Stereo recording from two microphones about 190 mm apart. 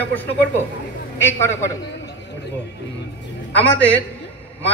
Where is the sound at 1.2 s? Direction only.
15° left (ahead or behind).